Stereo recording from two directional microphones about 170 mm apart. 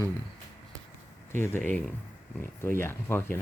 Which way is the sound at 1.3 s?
15° left (ahead or behind).